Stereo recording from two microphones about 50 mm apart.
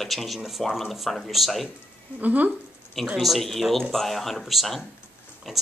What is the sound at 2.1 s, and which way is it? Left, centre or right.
Speech, right.